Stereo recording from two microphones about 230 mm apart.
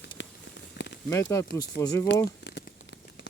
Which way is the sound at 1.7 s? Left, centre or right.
Left.